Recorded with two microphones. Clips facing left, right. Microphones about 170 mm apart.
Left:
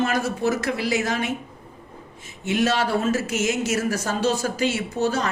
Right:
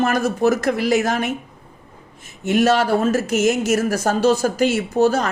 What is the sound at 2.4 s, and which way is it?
Speech, 45° right (ahead or behind).